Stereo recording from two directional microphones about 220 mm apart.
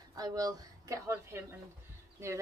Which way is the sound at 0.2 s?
15° right (ahead or behind).